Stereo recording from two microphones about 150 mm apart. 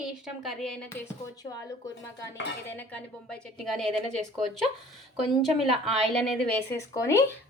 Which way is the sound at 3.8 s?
50° right (ahead or behind).